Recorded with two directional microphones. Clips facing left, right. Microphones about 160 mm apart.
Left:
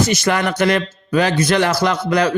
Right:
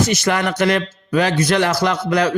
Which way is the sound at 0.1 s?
35° left (ahead or behind).